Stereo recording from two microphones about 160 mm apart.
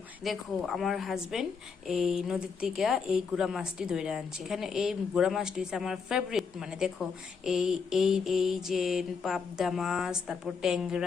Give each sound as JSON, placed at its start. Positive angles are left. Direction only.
{"t": 0.3, "sound": "a woman's voice", "side_deg": 0}